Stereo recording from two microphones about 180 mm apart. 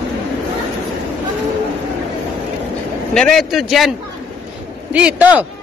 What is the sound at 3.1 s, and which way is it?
Speech, 5° left (ahead or behind).